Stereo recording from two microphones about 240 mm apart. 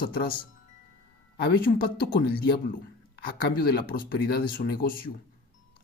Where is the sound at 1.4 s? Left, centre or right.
Left.